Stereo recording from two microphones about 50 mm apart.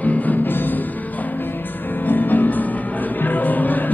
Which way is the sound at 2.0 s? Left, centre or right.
Left.